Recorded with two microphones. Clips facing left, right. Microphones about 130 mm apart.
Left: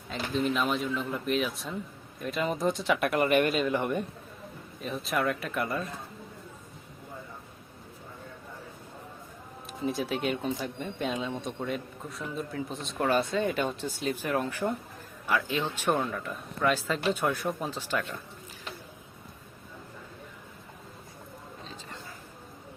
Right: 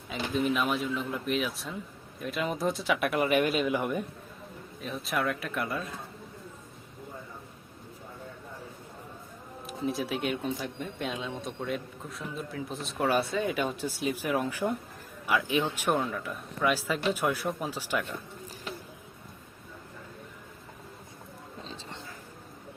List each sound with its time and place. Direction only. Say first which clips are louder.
0.1 s speech: even; 5° right (ahead or behind)
9.6 s speech: left 1 dB; centre (ahead or behind)
16.0 s speech: even; centre (ahead or behind)
21.6 s a sound: right 3 dB; 30° right (ahead or behind)